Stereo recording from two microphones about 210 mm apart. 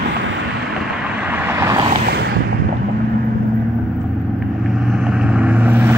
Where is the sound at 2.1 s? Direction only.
50° right (ahead or behind).